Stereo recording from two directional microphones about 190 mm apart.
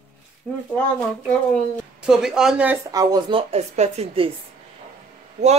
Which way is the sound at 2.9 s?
20° right (ahead or behind).